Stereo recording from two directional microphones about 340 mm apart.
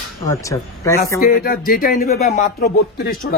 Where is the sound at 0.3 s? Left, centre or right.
Centre.